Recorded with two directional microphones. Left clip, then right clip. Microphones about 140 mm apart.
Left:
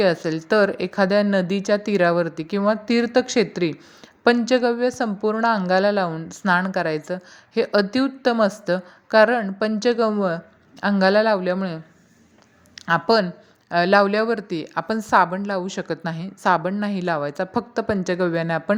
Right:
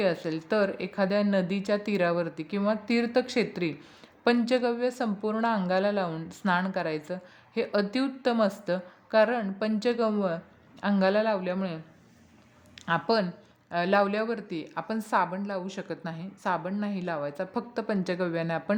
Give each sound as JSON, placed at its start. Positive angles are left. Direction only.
{"t": 0.0, "sound": "a woman's voice", "side_deg": 30}